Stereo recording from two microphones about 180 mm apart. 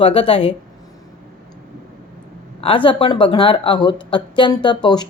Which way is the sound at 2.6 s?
30° left (ahead or behind).